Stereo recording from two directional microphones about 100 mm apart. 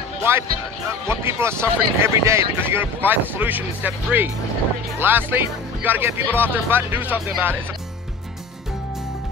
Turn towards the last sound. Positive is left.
turn(degrees=-20)  # may be behind; listen again after turning